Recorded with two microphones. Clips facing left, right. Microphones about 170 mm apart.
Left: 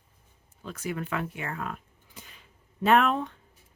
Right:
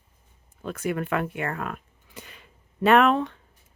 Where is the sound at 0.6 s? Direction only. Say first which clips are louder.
Right 6 dB; 55° right (ahead or behind); by 3.4 s 90° right.